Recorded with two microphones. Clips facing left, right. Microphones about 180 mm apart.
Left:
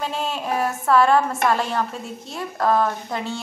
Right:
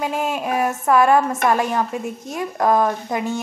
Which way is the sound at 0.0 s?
15° right (ahead or behind).